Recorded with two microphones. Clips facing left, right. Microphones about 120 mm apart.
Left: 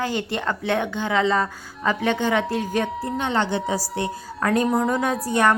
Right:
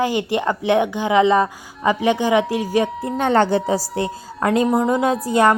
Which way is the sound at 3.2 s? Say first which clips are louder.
Right 8 dB; 45° right (ahead or behind).